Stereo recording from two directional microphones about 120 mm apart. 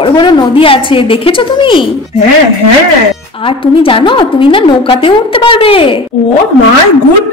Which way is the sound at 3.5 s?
45° left (ahead or behind).